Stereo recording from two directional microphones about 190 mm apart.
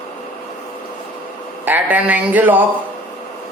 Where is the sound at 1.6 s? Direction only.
10° right (ahead or behind).